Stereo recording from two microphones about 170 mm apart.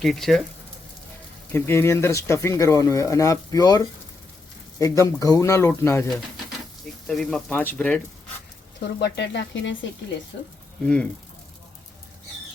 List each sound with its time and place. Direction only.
0.0 s speech: centre (ahead or behind)
1.5 s speech: 15° left (ahead or behind)
7.1 s speech: 5° left (ahead or behind)
9.0 s speech: 85° left
10.8 s speech: 5° left (ahead or behind)